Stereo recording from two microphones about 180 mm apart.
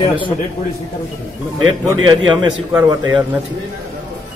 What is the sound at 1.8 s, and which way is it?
A man's voice, 25° right (ahead or behind).